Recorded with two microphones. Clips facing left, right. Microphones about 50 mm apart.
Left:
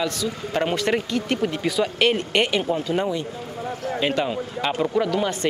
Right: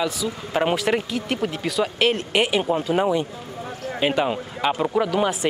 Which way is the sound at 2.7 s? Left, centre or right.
Right.